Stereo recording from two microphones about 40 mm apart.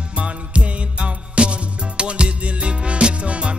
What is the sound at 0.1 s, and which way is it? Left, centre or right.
Music, right.